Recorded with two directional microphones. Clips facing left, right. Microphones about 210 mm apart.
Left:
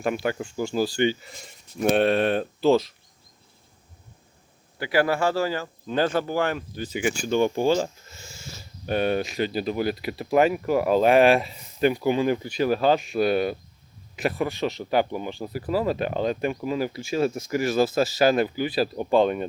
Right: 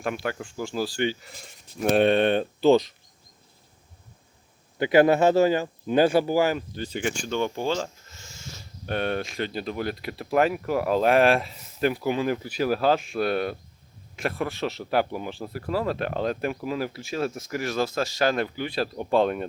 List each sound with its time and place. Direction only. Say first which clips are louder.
0.0 s speech: left 4 dB; centre (ahead or behind)
4.8 s speech: right 5 dB; 20° right (ahead or behind); by 6.7 s 5° right (ahead or behind)
6.7 s speech: left 2 dB; 10° left (ahead or behind)